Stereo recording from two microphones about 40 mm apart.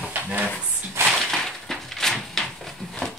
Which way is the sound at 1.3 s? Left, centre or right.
Centre.